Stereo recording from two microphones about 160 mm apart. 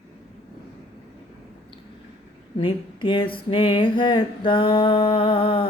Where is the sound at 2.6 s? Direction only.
30° left (ahead or behind).